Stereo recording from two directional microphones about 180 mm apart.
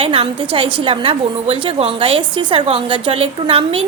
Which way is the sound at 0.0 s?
30° right (ahead or behind).